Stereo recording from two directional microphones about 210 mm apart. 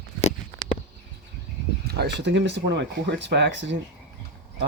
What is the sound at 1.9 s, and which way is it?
Speech, 50° right (ahead or behind).